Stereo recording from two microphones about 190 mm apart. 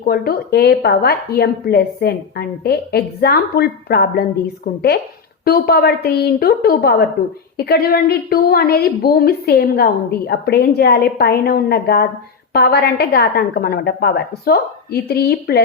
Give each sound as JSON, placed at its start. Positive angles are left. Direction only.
{"t": 0.0, "sound": "a woman's voice", "side_deg": 55}